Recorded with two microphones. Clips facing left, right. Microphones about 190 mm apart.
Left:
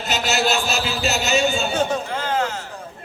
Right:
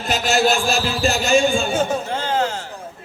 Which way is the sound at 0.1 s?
50° right (ahead or behind).